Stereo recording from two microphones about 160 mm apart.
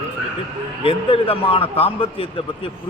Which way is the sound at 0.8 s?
35° left (ahead or behind).